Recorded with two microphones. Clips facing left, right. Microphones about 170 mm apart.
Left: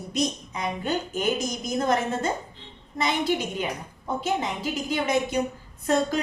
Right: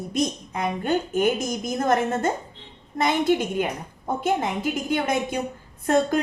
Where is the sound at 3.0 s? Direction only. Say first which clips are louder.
Right 4 dB; 50° right (ahead or behind).